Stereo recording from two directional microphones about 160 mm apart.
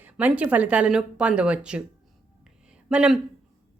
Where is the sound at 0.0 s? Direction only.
10° right (ahead or behind).